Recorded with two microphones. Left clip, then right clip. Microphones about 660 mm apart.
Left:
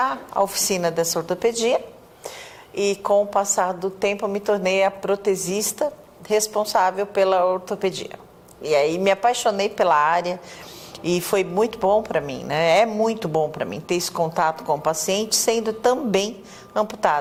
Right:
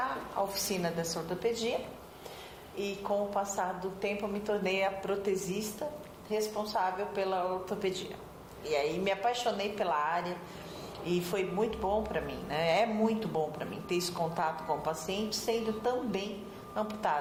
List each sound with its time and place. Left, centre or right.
0.0 s speech: left
2.7 s speech: left